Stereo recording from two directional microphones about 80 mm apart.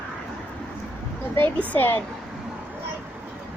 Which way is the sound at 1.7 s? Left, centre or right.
Left.